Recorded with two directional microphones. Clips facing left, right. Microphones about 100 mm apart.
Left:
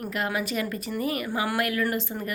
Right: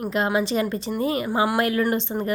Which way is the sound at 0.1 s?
25° right (ahead or behind).